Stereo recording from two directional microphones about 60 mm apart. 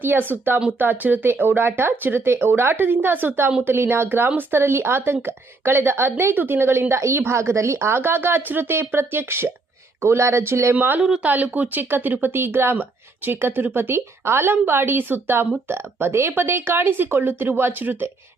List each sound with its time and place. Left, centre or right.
0.0 s speech: right
7.0 s speech: right
10.8 s speech: right